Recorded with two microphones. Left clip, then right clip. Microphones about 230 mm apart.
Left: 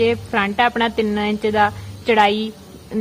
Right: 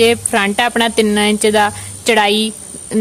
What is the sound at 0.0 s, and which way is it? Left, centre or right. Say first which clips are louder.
Speech: right 5 dB; right.